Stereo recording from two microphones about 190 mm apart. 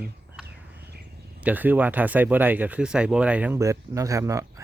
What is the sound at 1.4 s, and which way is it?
Speech, 10° right (ahead or behind).